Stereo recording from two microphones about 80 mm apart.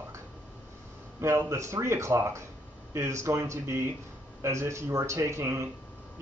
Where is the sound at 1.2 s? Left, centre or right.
Right.